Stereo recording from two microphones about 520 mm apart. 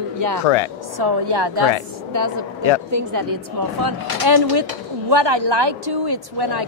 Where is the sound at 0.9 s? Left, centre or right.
Right.